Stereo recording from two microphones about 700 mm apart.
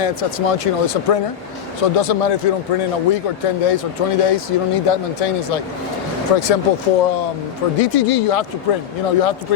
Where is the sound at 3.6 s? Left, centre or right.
Left.